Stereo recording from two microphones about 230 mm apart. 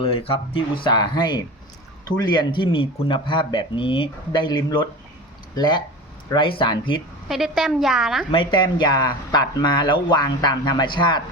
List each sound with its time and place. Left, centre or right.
0.0 s speech: left
7.3 s a woman's voice: centre
8.3 s speech: left